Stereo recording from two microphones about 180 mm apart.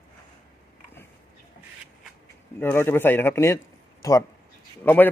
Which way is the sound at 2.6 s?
10° left (ahead or behind).